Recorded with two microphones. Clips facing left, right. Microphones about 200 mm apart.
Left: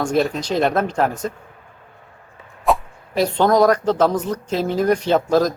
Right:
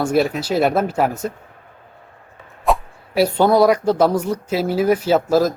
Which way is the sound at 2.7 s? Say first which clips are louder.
Even; centre (ahead or behind).